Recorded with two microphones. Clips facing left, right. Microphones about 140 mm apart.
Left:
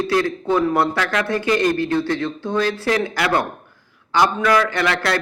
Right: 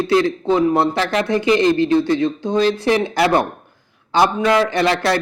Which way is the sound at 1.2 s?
20° right (ahead or behind).